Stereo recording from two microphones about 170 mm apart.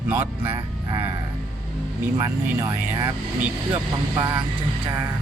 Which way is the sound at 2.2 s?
20° right (ahead or behind).